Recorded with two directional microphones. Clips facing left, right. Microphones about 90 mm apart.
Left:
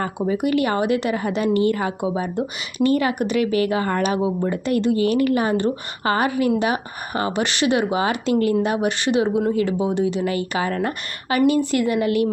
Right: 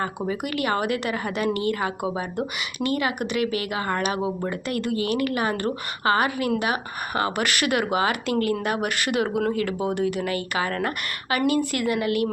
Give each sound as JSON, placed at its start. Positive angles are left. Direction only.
{"t": 0.3, "sound": "speech", "side_deg": 30}